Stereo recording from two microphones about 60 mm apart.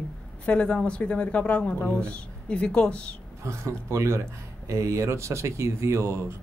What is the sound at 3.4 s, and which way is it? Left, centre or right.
Speech, right.